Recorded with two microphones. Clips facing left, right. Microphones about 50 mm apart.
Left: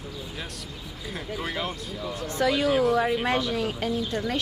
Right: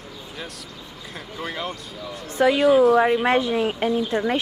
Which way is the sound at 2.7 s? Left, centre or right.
Centre.